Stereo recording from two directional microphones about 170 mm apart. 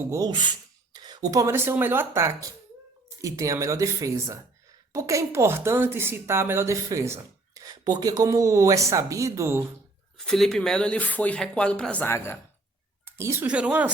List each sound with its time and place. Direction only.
0.0 s a woman's voice: 20° right (ahead or behind)
10.2 s speech: centre (ahead or behind)
13.1 s a woman's voice: 15° right (ahead or behind)